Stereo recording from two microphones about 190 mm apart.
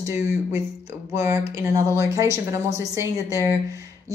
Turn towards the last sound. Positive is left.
turn(degrees=-15)  # may be behind; listen again after turning